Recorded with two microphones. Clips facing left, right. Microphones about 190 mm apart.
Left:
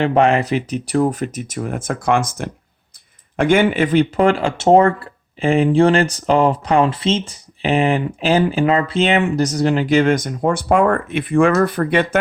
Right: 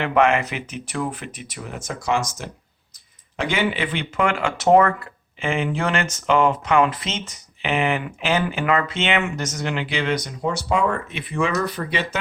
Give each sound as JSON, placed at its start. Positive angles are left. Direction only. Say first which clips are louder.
{"t": 0.0, "sound": "speech", "louder": "left 4 dB", "side_deg": 35}